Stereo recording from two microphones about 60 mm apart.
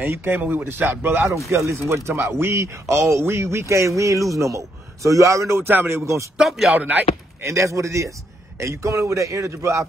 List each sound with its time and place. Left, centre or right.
0.0 s speech: right
1.7 s speech: right
2.5 s speech: right
5.6 s speech: right
6.3 s a man's voice: centre
6.7 s speech: right
7.4 s speech: right